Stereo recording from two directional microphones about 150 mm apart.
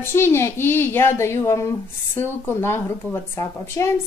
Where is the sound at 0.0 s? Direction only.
15° left (ahead or behind).